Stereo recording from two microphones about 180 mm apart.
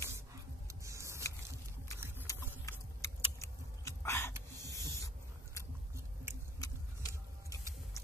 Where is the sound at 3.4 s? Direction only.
15° left (ahead or behind).